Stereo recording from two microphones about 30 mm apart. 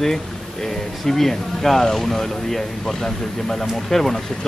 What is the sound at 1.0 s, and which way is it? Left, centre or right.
Speech, centre.